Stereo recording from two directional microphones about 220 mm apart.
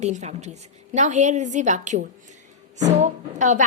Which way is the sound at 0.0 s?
30° right (ahead or behind).